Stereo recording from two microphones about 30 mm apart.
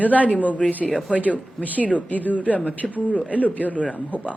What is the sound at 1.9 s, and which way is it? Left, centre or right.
A woman's voice, left.